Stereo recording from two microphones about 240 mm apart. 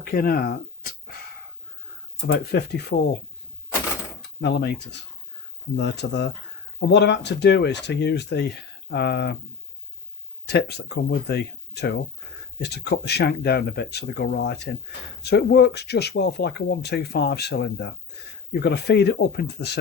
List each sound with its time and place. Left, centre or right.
0.0 s speech: left
2.2 s speech: left
4.4 s speech: left
10.4 s speech: left